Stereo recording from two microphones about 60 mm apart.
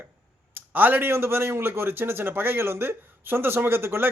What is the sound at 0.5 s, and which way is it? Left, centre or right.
A man's voice, right.